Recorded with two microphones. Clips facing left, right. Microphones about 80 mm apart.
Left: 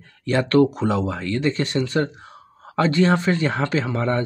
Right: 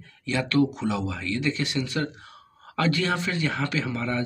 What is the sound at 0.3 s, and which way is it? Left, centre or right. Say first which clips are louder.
Speech: left 6 dB; left.